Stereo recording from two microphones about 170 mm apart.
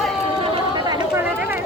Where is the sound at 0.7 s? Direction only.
25° right (ahead or behind).